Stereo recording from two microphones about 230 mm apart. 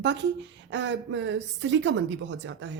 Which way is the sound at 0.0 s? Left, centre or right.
Right.